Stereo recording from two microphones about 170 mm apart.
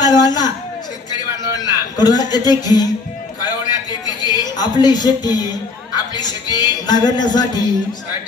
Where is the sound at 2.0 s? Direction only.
25° left (ahead or behind).